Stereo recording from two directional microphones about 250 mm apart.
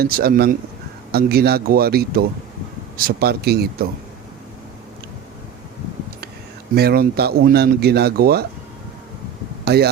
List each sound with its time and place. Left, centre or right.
0.0 s speech: right
6.7 s speech: right
9.6 s speech: right